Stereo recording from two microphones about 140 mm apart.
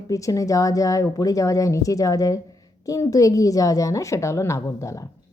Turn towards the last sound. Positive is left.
turn(degrees=20)  # may be behind; listen again after turning